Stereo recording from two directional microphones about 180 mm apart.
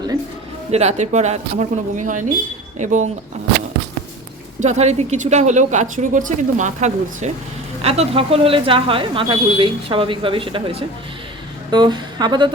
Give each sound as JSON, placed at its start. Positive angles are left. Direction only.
{"t": 0.7, "sound": "speech", "side_deg": -35}
{"t": 4.6, "sound": "speech", "side_deg": -40}